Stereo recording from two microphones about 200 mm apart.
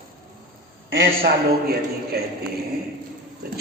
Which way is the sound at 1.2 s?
50° right (ahead or behind).